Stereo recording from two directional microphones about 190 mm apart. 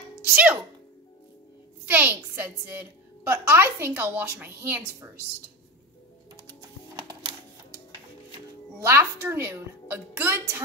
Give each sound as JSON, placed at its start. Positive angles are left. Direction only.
{"t": 0.2, "sound": "speech", "side_deg": -10}
{"t": 1.9, "sound": "a woman's voice", "side_deg": -10}
{"t": 7.0, "sound": "a sound", "side_deg": -20}
{"t": 8.8, "sound": "a woman's voice", "side_deg": -10}